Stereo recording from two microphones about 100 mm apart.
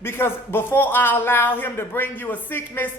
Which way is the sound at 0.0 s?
25° left (ahead or behind).